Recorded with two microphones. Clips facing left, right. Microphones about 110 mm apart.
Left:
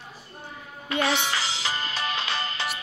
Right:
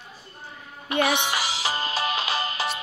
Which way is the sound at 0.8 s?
15° right (ahead or behind).